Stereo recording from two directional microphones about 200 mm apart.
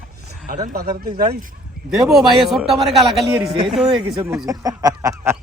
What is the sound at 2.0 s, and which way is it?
A man's voice, centre (ahead or behind).